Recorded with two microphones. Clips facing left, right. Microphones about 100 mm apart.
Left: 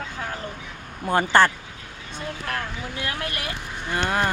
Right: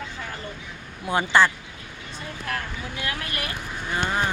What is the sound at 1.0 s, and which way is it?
Speech, 45° left (ahead or behind).